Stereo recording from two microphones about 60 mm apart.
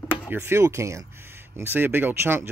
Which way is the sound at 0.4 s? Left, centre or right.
Right.